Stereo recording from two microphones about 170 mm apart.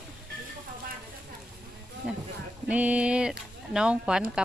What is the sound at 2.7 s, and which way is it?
Speech, 10° right (ahead or behind).